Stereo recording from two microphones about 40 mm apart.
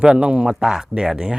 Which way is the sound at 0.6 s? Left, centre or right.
Centre.